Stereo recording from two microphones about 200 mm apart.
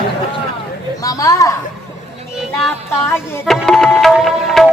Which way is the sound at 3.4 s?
Centre (ahead or behind).